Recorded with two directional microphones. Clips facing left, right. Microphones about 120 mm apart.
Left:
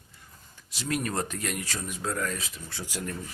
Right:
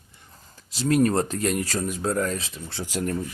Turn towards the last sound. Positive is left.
turn(degrees=-30)  # may be behind; listen again after turning